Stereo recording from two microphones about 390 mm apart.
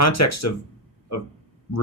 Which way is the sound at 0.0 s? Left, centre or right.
Left.